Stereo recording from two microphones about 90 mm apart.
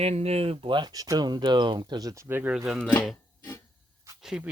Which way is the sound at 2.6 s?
5° right (ahead or behind).